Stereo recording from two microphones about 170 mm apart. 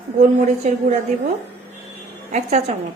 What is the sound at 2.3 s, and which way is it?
Speech, 40° right (ahead or behind).